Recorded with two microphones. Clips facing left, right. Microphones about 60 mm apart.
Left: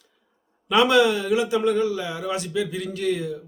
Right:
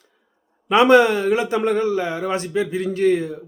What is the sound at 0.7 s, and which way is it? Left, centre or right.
A man's voice, right.